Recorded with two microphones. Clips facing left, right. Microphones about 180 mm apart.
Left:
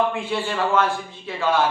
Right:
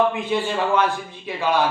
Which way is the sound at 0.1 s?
20° right (ahead or behind).